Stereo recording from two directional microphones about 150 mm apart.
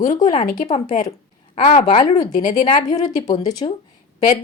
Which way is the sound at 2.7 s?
25° left (ahead or behind).